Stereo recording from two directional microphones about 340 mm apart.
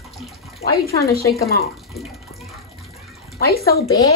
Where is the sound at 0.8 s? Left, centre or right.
Left.